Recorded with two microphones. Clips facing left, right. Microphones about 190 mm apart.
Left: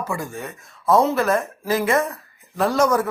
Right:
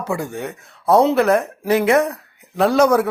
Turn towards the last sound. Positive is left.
turn(degrees=-65)  # may be behind; listen again after turning